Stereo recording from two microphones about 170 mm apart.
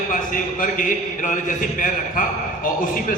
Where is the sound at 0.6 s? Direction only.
50° left (ahead or behind).